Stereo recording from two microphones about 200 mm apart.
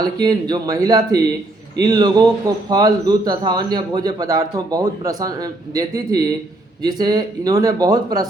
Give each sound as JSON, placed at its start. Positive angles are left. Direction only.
{"t": 0.0, "sound": "a man's voice", "side_deg": -20}